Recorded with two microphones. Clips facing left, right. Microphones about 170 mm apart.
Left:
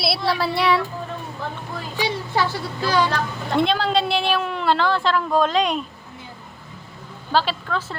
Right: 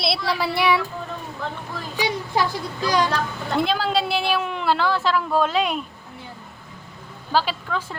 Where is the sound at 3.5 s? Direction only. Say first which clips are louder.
Left 2 dB; 5° right (ahead or behind).